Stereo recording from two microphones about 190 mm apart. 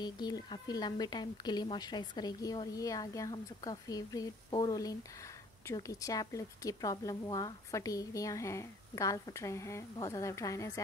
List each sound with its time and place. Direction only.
0.0 s a woman's voice: 20° left (ahead or behind)